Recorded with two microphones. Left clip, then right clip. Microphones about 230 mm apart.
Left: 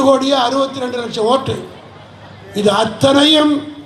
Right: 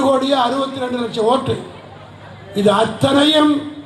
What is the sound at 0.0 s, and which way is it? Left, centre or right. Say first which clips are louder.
A man's voice: left 3 dB; left.